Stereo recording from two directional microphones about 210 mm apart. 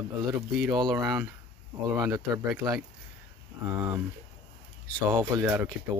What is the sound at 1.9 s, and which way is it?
Speech, 15° right (ahead or behind).